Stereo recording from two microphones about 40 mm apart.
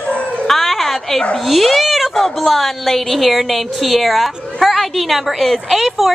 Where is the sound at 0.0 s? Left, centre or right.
Left.